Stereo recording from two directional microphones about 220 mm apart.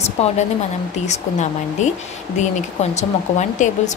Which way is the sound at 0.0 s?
30° left (ahead or behind).